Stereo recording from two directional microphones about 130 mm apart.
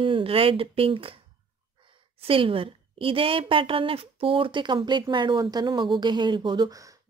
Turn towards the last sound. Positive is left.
turn(degrees=-25)  # may be behind; listen again after turning